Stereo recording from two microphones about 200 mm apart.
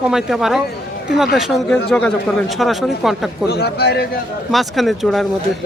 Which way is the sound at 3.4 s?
55° left (ahead or behind).